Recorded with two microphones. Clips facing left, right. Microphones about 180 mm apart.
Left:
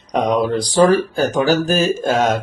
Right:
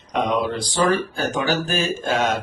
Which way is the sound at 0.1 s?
40° left (ahead or behind).